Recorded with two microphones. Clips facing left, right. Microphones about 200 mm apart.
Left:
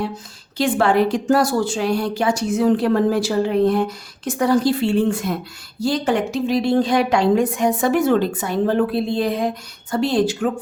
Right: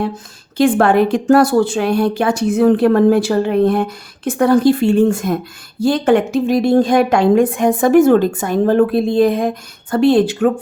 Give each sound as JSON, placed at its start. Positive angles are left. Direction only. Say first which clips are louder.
{"t": 0.5, "sound": "a woman's voice", "louder": "right 5 dB", "side_deg": -55}